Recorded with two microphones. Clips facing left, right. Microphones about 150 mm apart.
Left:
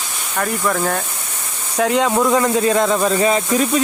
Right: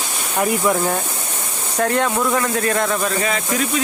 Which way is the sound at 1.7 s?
10° left (ahead or behind).